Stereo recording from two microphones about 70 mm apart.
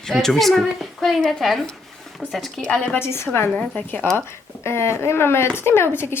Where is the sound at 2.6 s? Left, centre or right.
Centre.